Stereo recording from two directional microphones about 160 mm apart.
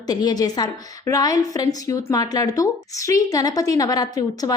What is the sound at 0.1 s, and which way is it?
A woman's voice, 25° left (ahead or behind).